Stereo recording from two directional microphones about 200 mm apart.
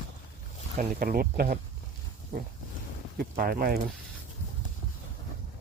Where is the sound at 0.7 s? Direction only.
45° right (ahead or behind).